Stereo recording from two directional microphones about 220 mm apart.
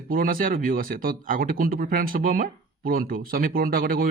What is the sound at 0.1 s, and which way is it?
Speech, 40° right (ahead or behind).